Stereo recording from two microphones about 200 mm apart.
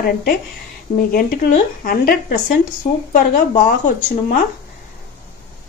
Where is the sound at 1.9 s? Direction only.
45° left (ahead or behind).